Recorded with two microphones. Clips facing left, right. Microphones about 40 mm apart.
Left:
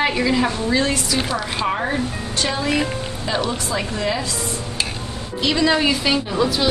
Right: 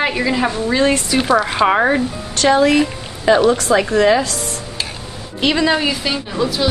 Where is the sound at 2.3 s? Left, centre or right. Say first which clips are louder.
Right 10 dB; right.